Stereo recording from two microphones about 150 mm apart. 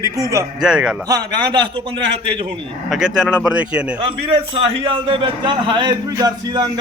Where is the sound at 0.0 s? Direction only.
20° right (ahead or behind).